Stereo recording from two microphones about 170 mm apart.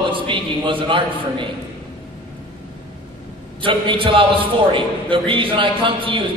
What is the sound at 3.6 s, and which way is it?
A man's voice, 30° right (ahead or behind).